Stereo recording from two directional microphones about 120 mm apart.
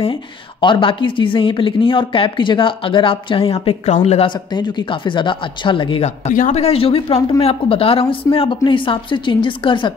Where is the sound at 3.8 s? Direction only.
70° left (ahead or behind).